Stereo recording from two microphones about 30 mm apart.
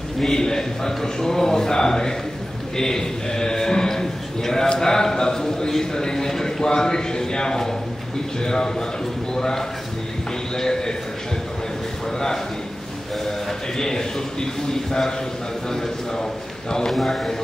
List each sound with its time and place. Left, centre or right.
0.3 s a man's voice: left
10.5 s a sound: left
13.7 s a man's voice: left
16.9 s speech: centre